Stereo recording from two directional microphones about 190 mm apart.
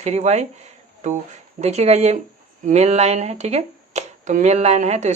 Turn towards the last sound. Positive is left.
turn(degrees=-35)  # may be behind; listen again after turning